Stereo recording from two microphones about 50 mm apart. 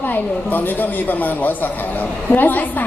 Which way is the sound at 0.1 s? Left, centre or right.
Left.